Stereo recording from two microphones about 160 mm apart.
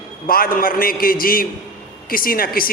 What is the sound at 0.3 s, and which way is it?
Speech, 65° left (ahead or behind).